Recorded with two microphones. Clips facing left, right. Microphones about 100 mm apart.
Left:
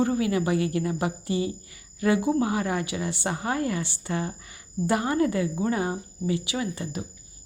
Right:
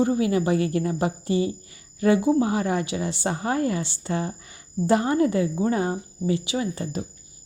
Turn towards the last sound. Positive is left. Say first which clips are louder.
# right 3 dB
turn(degrees=-35)  # may be behind; listen again after turning